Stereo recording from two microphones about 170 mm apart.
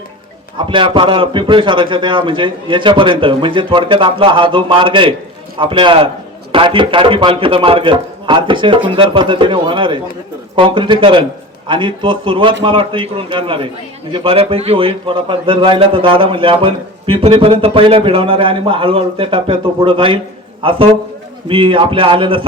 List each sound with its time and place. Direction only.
0.6 s a man's voice: 30° right (ahead or behind)